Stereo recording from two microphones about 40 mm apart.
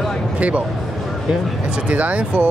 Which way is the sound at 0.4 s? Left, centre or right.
Right.